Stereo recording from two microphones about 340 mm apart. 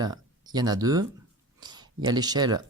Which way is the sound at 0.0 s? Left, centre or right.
Centre.